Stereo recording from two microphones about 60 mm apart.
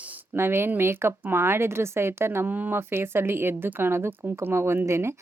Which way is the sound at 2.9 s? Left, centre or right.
Right.